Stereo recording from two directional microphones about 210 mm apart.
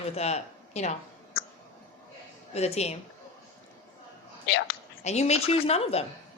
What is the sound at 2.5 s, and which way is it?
Speech, 30° left (ahead or behind).